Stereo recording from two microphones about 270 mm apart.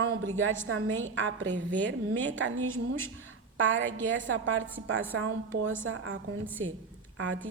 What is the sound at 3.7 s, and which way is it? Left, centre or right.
A woman's voice, right.